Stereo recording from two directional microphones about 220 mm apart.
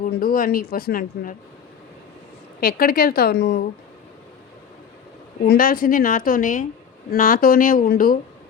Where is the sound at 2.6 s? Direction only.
40° left (ahead or behind).